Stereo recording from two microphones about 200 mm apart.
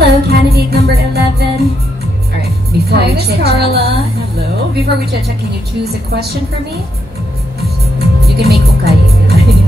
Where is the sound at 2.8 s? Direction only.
55° right (ahead or behind).